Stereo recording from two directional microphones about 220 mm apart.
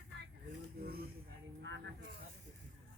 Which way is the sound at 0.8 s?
45° right (ahead or behind).